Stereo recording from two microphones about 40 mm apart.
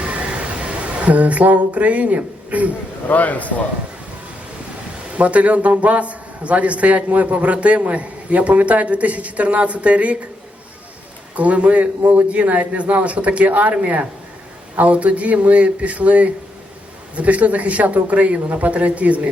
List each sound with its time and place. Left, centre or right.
0.0 s a sound: right
3.1 s a man's voice: left
5.1 s a man's voice: right
11.3 s a man's voice: right